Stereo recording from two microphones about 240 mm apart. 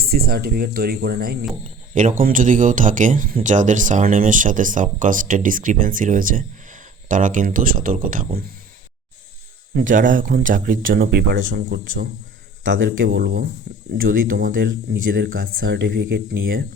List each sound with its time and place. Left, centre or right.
0.0 s speech: right
9.7 s speech: right